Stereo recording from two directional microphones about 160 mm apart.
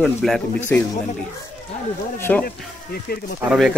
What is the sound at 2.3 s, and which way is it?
Speech, 10° left (ahead or behind).